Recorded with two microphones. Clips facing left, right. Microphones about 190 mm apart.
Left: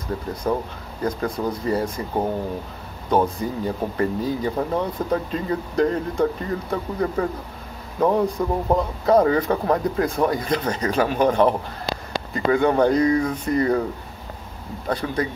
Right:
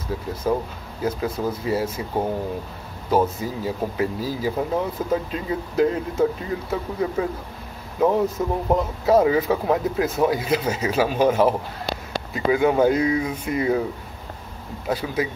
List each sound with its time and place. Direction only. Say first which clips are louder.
0.1 s speech: even; 5° right (ahead or behind)
3.1 s speech: even; 5° right (ahead or behind)
14.9 s speech: even; 5° right (ahead or behind)